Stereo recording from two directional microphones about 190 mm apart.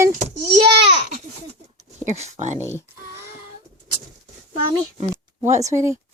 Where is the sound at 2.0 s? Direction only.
35° right (ahead or behind).